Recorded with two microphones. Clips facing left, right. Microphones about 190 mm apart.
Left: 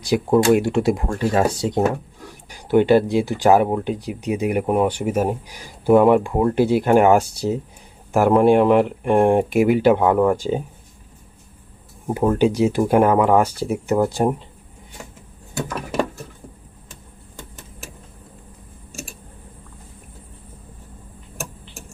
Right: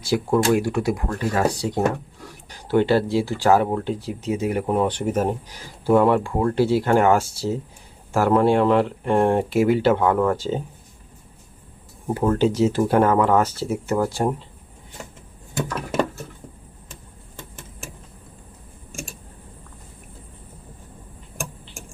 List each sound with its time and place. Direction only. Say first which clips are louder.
0.0 s speech: left 3 dB; 20° left (ahead or behind)
12.0 s speech: left 2 dB; 15° left (ahead or behind)